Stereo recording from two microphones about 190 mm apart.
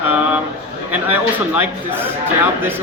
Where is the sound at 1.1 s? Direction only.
10° right (ahead or behind).